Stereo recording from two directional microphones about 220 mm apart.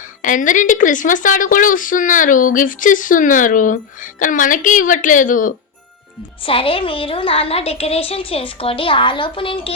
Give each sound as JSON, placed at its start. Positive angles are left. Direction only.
{"t": 0.2, "sound": "a woman's voice", "side_deg": 35}
{"t": 6.4, "sound": "a woman's voice", "side_deg": 25}